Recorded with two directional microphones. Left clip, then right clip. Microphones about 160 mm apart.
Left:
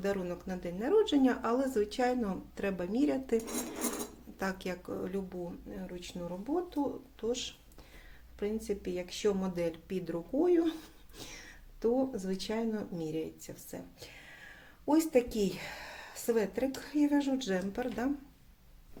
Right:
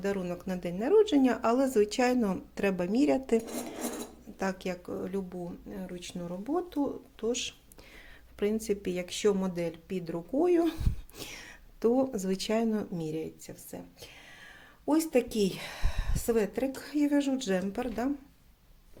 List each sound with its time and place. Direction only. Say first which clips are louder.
0.0 s speech: right 1 dB; 15° right (ahead or behind)
0.3 s speech: right 3 dB; 30° right (ahead or behind)
9.6 s speech: even; 20° right (ahead or behind)
10.3 s speech: right 2 dB; 35° right (ahead or behind); by 14.5 s 15° right (ahead or behind)
14.8 s speech: right 1 dB; 25° right (ahead or behind)